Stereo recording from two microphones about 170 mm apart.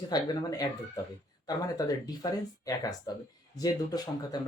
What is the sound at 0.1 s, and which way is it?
Speech, 20° left (ahead or behind).